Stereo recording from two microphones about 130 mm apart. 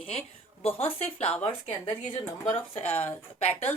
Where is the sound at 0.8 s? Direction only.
50° left (ahead or behind).